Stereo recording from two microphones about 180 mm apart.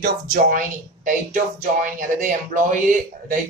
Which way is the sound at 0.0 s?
50° right (ahead or behind).